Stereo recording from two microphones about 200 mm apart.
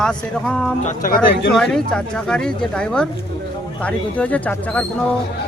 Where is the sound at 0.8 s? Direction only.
40° left (ahead or behind).